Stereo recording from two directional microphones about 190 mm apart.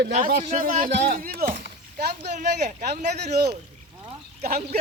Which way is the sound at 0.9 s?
60° right (ahead or behind).